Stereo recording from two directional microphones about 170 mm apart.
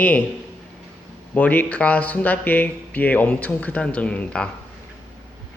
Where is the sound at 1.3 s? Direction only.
10° left (ahead or behind).